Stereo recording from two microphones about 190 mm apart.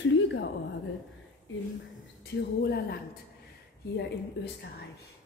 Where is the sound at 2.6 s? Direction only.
55° left (ahead or behind).